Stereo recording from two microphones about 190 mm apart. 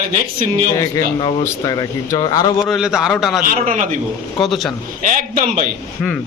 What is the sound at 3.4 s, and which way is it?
Speech, 45° right (ahead or behind).